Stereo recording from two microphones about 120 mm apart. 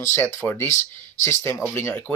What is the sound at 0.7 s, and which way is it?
Speech, 90° left.